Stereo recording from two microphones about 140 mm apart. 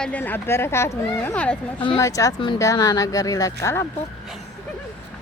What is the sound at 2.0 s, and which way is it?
A woman's voice, 20° left (ahead or behind).